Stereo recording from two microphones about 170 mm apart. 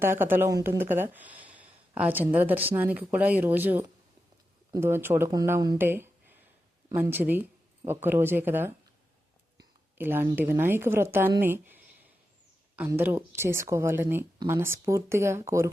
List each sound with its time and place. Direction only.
0.0 s speech: 15° right (ahead or behind)
10.0 s speech: 15° right (ahead or behind)
13.0 s speech: 10° right (ahead or behind)